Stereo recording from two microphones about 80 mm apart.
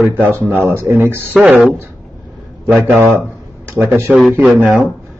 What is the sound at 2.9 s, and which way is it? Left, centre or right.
Speech, centre.